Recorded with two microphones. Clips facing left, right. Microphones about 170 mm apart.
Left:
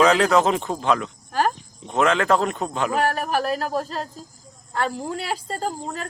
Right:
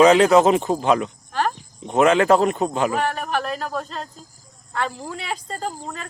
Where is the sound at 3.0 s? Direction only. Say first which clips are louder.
Left 2 dB; 40° left (ahead or behind).